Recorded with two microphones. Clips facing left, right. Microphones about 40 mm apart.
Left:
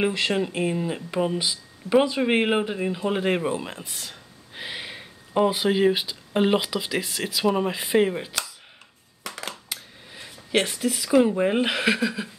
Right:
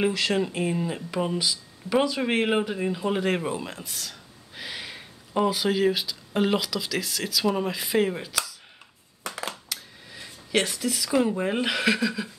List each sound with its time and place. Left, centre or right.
0.3 s speech: centre
1.4 s speech: centre
7.4 s speech: centre
9.2 s crushing: centre
9.7 s speech: centre